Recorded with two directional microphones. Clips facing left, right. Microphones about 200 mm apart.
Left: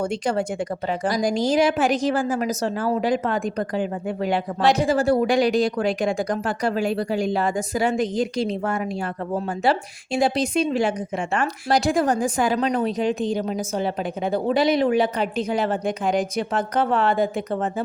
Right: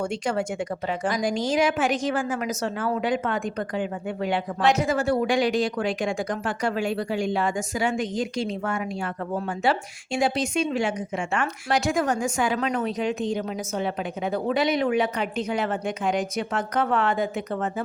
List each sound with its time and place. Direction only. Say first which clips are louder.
0.0 s a woman's voice: left 3 dB; 35° left (ahead or behind)